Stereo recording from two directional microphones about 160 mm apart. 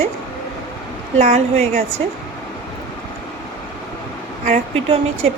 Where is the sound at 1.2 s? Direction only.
45° right (ahead or behind).